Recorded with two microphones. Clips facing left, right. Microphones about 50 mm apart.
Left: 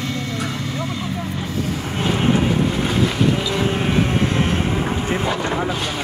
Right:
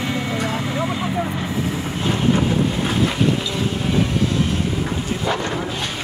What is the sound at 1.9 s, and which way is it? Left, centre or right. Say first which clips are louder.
Vehicle: left 1 dB; left.